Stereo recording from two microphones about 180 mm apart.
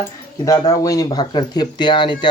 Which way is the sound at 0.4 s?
20° left (ahead or behind).